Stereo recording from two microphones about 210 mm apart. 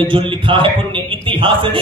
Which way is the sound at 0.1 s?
25° right (ahead or behind).